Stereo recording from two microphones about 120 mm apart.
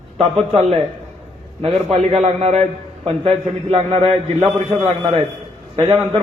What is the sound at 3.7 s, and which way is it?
Speech, 60° right (ahead or behind).